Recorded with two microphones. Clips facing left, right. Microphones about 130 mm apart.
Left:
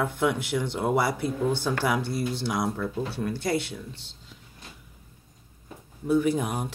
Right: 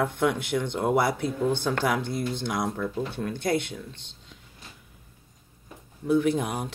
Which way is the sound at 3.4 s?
50° right (ahead or behind).